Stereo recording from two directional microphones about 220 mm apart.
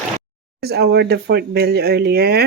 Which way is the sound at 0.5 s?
45° right (ahead or behind).